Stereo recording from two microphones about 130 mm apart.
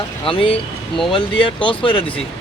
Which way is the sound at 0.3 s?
45° left (ahead or behind).